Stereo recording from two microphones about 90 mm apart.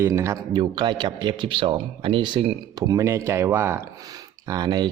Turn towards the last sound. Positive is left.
turn(degrees=-50)  # may be behind; listen again after turning